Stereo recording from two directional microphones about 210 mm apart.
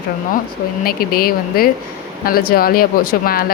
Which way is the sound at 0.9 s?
45° left (ahead or behind).